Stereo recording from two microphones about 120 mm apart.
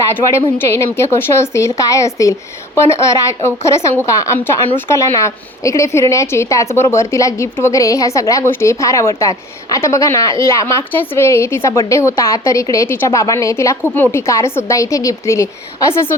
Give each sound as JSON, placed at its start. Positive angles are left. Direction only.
{"t": 0.1, "sound": "a woman's voice", "side_deg": 25}